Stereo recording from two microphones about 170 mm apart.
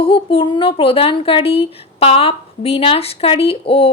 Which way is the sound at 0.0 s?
35° left (ahead or behind).